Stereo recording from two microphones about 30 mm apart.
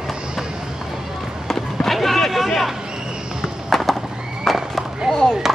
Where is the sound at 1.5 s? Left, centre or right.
Centre.